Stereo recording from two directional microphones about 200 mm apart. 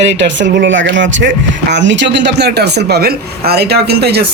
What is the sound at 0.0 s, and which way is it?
Speech, 60° right (ahead or behind).